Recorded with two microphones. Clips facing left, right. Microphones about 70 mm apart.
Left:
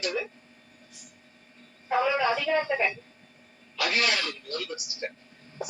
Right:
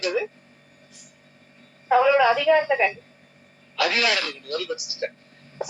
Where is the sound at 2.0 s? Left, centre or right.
Right.